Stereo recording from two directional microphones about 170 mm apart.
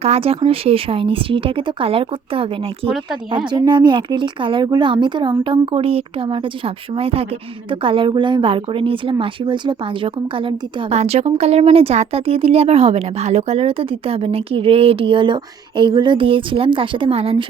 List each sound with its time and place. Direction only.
0.0 s a woman's voice: 35° right (ahead or behind)